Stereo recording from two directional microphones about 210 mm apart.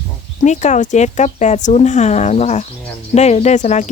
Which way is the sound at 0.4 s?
35° left (ahead or behind).